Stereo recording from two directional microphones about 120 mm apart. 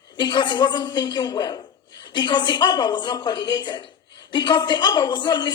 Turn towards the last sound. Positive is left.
turn(degrees=40)  # may be behind; listen again after turning